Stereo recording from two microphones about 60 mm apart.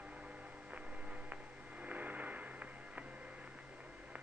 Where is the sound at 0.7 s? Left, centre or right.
Right.